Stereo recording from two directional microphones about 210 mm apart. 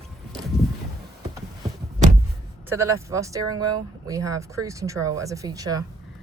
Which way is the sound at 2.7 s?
15° right (ahead or behind).